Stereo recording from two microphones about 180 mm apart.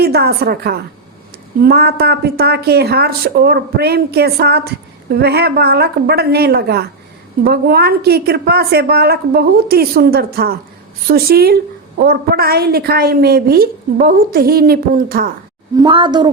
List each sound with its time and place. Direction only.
0.0 s speech: 60° right (ahead or behind)
15.8 s a woman's voice: 25° right (ahead or behind)